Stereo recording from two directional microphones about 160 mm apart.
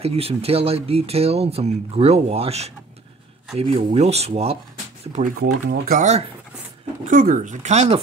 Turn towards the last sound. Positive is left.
turn(degrees=-45)  # may be behind; listen again after turning